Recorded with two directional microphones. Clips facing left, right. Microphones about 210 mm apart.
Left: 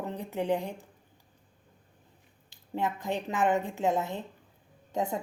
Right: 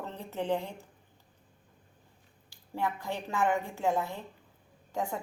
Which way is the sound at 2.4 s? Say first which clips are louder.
Left 2 dB; 20° left (ahead or behind).